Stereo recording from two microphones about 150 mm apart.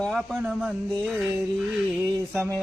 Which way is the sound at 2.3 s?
10° left (ahead or behind).